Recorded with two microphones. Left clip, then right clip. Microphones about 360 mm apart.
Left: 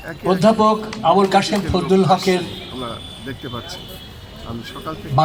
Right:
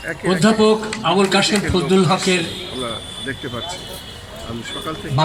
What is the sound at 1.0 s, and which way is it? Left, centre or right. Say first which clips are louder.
Speech: left 5 dB; centre.